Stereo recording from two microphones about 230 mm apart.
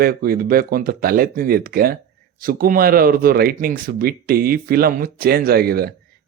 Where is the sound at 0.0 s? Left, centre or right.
Right.